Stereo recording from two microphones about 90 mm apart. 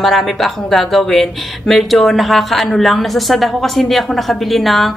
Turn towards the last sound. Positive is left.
turn(degrees=0)  # may be behind; listen again after turning